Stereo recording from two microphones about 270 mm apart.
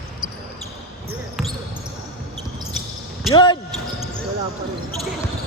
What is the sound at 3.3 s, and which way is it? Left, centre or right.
Speech, centre.